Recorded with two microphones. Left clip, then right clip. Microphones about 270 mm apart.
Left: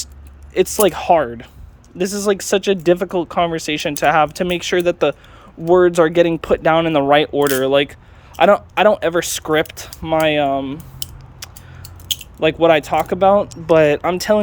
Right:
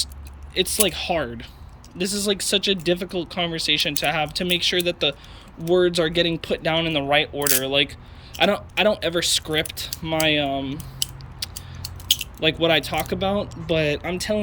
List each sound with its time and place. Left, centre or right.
0.5 s speech: centre
11.5 s a sound: centre
13.7 s speech: centre